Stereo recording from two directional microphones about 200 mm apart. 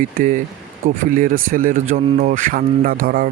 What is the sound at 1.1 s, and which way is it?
A man's voice, 45° right (ahead or behind).